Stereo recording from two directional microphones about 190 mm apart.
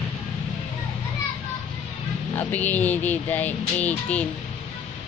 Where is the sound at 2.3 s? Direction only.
10° left (ahead or behind).